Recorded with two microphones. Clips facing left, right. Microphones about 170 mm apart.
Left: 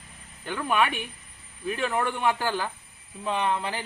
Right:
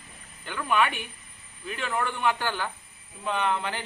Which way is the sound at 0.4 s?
35° left (ahead or behind).